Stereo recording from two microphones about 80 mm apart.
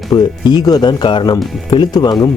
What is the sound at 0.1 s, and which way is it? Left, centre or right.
Speech, left.